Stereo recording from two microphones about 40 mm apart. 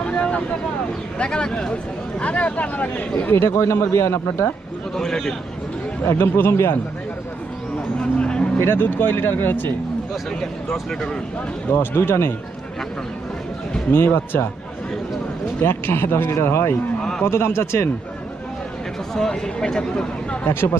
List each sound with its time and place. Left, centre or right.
0.0 s vehicle: left
1.2 s speech: left
3.2 s speech: left
4.9 s a man's voice: centre
6.1 s speech: left
7.9 s vehicle: left
8.5 s speech: left
11.7 s speech: left
13.9 s speech: left
15.6 s a man's voice: left
17.0 s a sound: centre
17.2 s speech: left
19.1 s speech: centre